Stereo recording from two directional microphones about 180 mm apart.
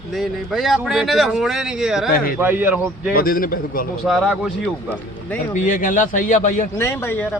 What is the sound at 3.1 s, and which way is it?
Speech, 55° left (ahead or behind).